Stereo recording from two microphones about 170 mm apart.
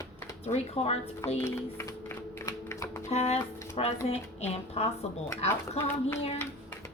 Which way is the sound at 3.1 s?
40° left (ahead or behind).